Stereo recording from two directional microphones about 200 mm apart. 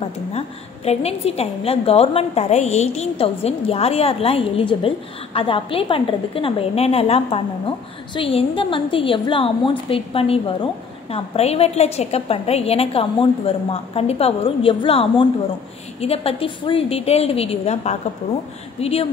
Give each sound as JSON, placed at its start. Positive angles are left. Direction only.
{"t": 0.8, "sound": "a woman's voice", "side_deg": 30}